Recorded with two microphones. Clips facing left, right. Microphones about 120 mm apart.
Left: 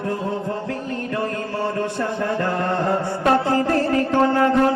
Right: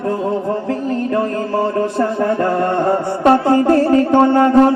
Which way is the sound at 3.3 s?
30° right (ahead or behind).